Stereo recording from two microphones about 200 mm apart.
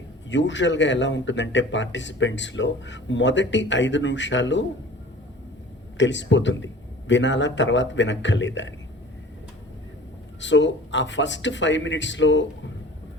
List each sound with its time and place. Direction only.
0.3 s a man's voice: 65° left (ahead or behind)
6.0 s a man's voice: 65° left (ahead or behind)
10.4 s a man's voice: 65° left (ahead or behind)